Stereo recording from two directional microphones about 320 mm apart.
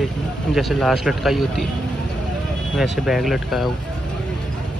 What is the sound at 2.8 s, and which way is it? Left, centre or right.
Speech, centre.